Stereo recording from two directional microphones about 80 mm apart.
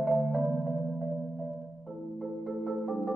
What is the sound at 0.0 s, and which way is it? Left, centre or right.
Music, centre.